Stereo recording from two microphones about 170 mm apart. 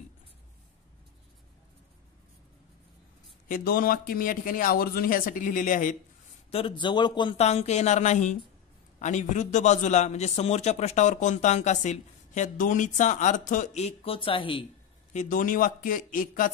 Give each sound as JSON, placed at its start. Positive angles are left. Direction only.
{"t": 3.4, "sound": "a man's voice", "side_deg": 55}
{"t": 6.5, "sound": "speech", "side_deg": 30}
{"t": 7.3, "sound": "a woman's voice", "side_deg": 40}
{"t": 15.1, "sound": "a man's voice", "side_deg": 50}